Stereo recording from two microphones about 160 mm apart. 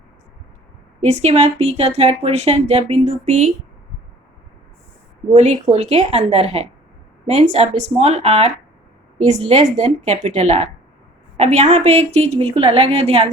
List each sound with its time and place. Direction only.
1.0 s a woman's voice: 40° right (ahead or behind)
5.3 s a woman's voice: 45° right (ahead or behind)